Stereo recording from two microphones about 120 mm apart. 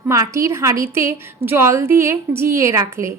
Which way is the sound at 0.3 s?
25° right (ahead or behind).